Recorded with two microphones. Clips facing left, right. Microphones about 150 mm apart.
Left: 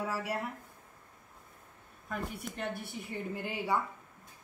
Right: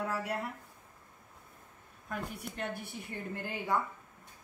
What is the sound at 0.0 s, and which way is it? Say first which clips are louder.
Speech: even; 5° left (ahead or behind).